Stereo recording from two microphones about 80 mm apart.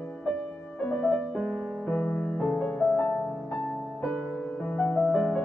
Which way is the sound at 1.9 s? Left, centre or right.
Centre.